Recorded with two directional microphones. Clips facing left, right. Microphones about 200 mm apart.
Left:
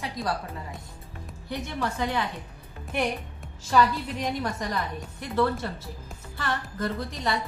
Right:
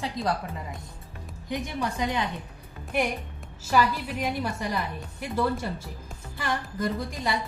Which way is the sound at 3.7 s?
10° right (ahead or behind).